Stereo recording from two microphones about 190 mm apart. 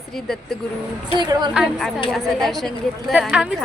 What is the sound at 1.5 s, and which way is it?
A woman's voice, centre (ahead or behind).